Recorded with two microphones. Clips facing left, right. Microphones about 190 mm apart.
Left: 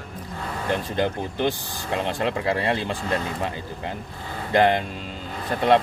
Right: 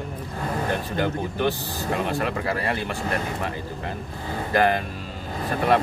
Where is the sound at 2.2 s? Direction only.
25° left (ahead or behind).